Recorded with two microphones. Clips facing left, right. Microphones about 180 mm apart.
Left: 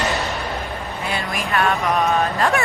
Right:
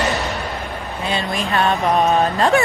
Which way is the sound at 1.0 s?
25° right (ahead or behind).